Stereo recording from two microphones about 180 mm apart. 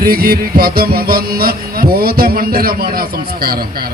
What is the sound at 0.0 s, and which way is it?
A man's voice, 55° right (ahead or behind).